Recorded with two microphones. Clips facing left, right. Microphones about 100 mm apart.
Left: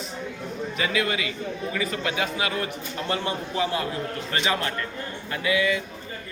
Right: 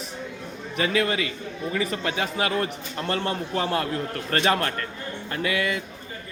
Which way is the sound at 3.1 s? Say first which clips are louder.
Right 2 dB; 50° right (ahead or behind).